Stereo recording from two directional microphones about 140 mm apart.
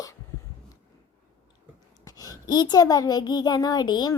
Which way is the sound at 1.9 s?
25° left (ahead or behind).